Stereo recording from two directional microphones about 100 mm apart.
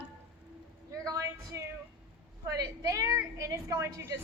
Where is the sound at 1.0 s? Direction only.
30° right (ahead or behind).